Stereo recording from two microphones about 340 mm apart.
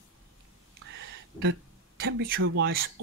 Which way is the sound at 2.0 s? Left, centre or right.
Right.